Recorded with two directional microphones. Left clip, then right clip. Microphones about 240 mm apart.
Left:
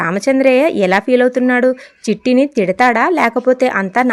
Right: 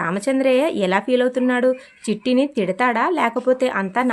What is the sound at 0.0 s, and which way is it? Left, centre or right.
Speech, left.